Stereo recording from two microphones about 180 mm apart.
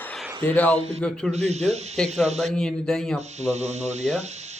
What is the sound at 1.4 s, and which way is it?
Speech, 35° right (ahead or behind).